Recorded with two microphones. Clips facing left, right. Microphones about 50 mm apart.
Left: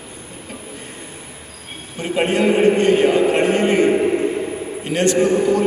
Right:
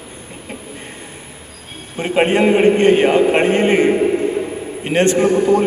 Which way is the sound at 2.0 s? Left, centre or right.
Right.